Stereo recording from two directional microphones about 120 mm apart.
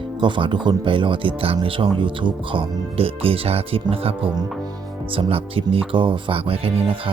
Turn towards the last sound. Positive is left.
turn(degrees=-50)  # may be behind; listen again after turning